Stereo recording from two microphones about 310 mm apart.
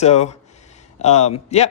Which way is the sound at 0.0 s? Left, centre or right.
Left.